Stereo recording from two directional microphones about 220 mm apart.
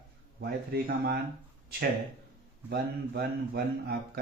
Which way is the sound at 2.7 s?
45° right (ahead or behind).